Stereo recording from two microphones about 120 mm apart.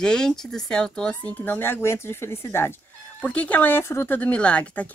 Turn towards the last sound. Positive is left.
turn(degrees=10)  # may be behind; listen again after turning